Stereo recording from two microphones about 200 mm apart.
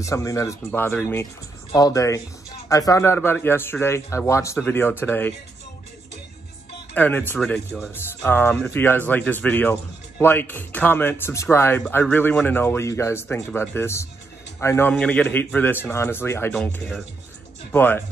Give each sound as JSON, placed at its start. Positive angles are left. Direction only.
{"t": 0.0, "sound": "speech", "side_deg": 15}
{"t": 6.9, "sound": "speech", "side_deg": 10}